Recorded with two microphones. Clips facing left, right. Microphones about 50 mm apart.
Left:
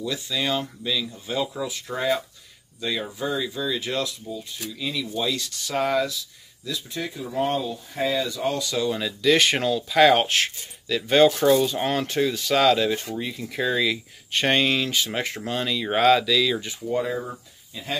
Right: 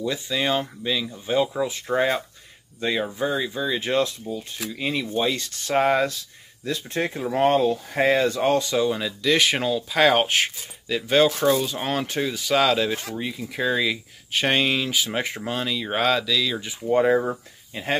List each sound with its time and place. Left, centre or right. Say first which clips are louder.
0.0 s speech: right 2 dB; right
8.9 s speech: left 1 dB; centre
16.8 s speech: right 9 dB; right